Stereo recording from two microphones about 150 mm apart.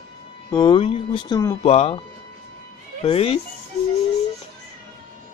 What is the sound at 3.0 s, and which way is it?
Speech, 40° left (ahead or behind).